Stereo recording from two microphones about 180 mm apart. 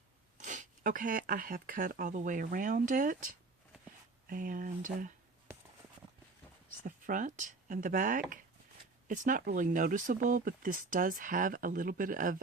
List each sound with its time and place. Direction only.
0.3 s speech: 45° right (ahead or behind)
6.8 s speech: 45° right (ahead or behind)